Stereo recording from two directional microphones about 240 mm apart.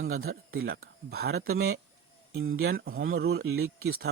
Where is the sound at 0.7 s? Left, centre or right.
Right.